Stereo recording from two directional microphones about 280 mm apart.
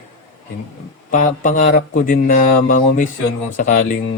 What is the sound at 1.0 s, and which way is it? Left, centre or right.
Speech, left.